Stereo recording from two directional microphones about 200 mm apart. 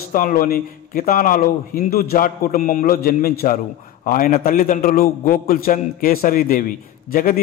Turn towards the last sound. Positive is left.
turn(degrees=45)  # may be behind; listen again after turning